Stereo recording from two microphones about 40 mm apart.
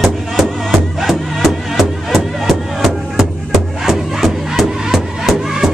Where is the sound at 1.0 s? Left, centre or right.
Centre.